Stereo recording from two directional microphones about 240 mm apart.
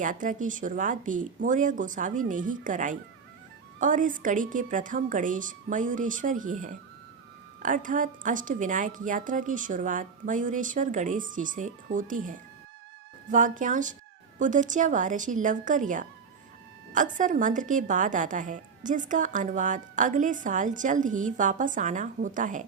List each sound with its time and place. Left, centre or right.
0.0 s a woman's voice: right